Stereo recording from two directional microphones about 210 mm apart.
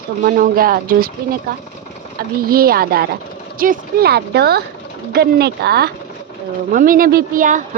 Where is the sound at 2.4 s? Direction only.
45° right (ahead or behind).